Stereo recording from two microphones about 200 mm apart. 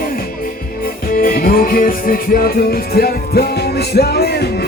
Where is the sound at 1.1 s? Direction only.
45° left (ahead or behind).